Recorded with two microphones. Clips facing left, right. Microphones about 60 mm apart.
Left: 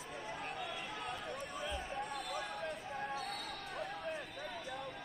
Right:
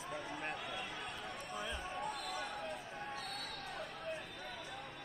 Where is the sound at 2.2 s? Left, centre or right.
Centre.